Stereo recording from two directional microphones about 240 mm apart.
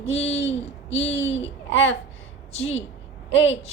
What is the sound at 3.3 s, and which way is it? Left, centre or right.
Speech, left.